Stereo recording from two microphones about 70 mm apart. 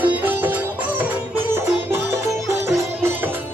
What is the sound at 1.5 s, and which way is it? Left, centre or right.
Music, right.